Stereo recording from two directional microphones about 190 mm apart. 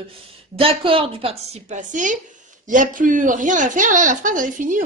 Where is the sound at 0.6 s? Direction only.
30° right (ahead or behind).